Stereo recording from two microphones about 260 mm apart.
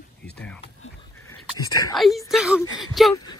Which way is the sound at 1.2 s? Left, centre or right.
Centre.